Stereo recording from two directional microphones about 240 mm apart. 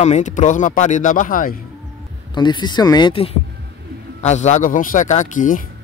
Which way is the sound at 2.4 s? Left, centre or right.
Centre.